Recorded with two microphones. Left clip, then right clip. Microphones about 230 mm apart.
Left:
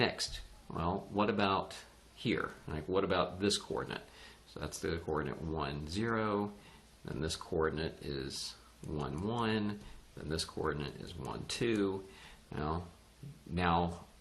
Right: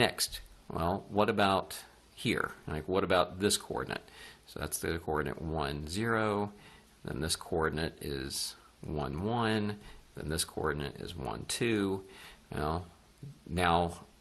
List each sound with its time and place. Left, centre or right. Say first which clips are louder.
0.0 s speech: right 4 dB; right